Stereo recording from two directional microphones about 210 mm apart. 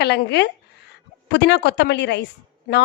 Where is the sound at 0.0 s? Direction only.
55° left (ahead or behind).